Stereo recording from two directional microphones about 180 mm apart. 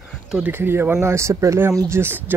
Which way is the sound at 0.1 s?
Centre (ahead or behind).